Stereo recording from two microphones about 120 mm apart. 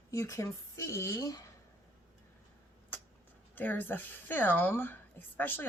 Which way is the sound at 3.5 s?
15° left (ahead or behind).